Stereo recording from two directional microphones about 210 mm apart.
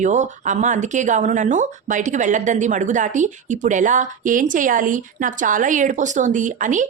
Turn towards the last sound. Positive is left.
turn(degrees=-35)  # may be behind; listen again after turning